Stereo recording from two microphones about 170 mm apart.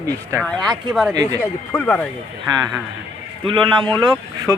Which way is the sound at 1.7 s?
10° left (ahead or behind).